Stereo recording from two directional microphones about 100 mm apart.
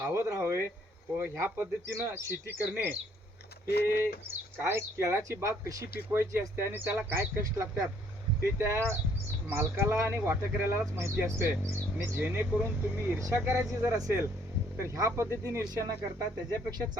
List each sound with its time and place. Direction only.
0.1 s speech: 25° right (ahead or behind)
4.0 s speech: 25° right (ahead or behind); by 17.0 s 40° right (ahead or behind)